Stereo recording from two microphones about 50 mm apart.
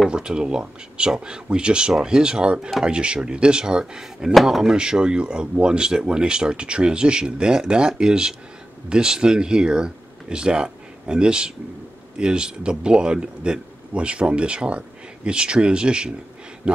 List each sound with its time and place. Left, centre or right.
0.1 s speech: centre
4.3 s speech: centre
4.7 s speech: centre